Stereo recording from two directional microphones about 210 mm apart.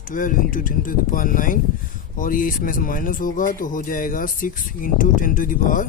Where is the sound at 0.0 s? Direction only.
40° left (ahead or behind).